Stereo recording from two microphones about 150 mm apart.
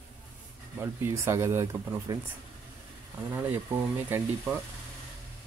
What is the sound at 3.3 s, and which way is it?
Speech, 15° right (ahead or behind).